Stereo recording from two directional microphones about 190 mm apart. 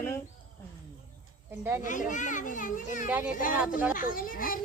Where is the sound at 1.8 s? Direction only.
40° left (ahead or behind).